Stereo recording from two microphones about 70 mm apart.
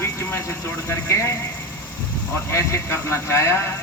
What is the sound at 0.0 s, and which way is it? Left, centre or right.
Vehicle, left.